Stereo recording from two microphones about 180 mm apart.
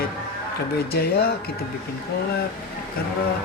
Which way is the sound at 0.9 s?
60° left (ahead or behind).